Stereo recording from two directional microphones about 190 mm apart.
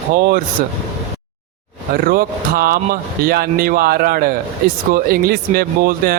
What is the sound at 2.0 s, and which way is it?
Speech, 50° right (ahead or behind).